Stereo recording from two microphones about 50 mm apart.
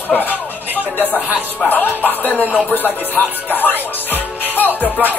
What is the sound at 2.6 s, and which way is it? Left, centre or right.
Music, left.